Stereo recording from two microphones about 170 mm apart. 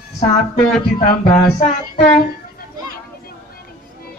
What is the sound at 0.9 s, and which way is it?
Speech, 50° left (ahead or behind).